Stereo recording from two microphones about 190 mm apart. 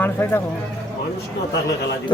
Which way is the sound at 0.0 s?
10° left (ahead or behind).